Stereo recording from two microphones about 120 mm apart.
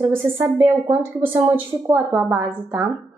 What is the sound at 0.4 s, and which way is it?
A woman's voice, 20° right (ahead or behind).